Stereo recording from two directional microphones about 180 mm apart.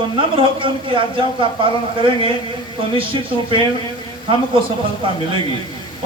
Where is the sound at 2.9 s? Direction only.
30° right (ahead or behind).